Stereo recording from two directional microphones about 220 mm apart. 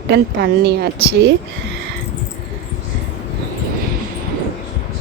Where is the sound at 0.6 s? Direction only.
50° right (ahead or behind).